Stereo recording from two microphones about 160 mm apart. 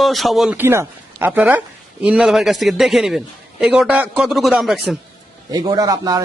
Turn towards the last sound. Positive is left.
turn(degrees=-25)  # may be behind; listen again after turning